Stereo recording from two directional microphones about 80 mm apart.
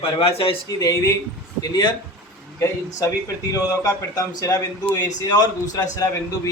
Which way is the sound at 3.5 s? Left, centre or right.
Left.